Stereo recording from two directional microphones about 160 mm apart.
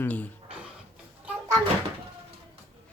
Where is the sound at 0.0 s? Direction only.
10° left (ahead or behind).